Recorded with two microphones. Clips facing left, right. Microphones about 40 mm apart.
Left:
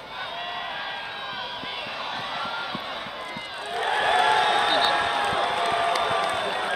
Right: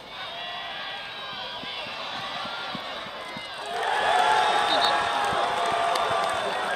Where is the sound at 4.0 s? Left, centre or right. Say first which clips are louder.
Left 1 dB; left.